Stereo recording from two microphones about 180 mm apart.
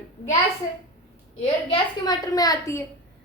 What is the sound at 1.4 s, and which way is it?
Speech, 30° left (ahead or behind).